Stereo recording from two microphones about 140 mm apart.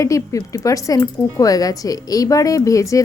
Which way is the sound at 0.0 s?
25° left (ahead or behind).